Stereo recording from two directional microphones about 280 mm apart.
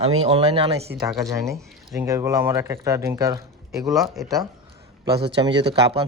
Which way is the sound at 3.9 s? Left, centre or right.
Centre.